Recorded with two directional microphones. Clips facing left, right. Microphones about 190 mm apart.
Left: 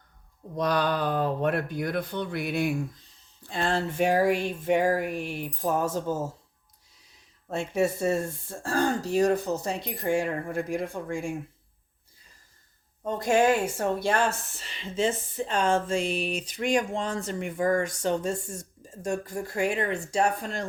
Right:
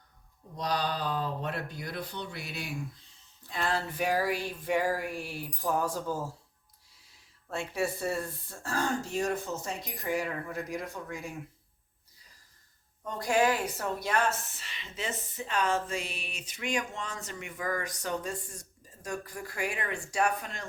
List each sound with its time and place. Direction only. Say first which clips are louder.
0.5 s speech: left 6 dB; 55° left (ahead or behind)
3.5 s speech: left 5 dB; 25° left (ahead or behind)
7.0 s a sound: left 6 dB; 20° left (ahead or behind)
7.9 s speech: left 6 dB; 25° left (ahead or behind)
13.1 s speech: left 5 dB; 25° left (ahead or behind)